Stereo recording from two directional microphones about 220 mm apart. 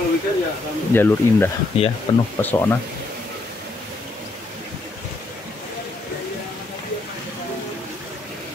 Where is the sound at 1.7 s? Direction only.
25° left (ahead or behind).